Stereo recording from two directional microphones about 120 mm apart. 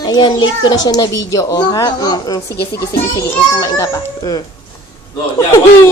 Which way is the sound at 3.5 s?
30° left (ahead or behind).